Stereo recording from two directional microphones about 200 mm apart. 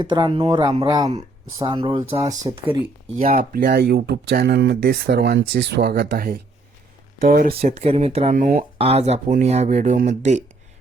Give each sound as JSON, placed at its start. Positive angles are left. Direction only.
{"t": 0.0, "sound": "speech", "side_deg": -25}
{"t": 3.5, "sound": "speech", "side_deg": -45}
{"t": 7.6, "sound": "speech", "side_deg": -30}
{"t": 8.8, "sound": "speech", "side_deg": -30}